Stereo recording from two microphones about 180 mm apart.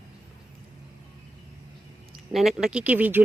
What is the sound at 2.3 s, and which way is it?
Speech, 5° right (ahead or behind).